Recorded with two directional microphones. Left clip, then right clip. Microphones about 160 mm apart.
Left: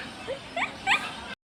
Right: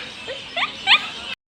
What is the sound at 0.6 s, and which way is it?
Rodents, 5° left (ahead or behind).